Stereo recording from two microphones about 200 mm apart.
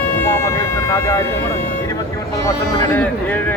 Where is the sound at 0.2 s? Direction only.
15° left (ahead or behind).